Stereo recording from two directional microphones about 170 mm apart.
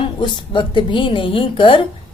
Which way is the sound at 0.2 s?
30° left (ahead or behind).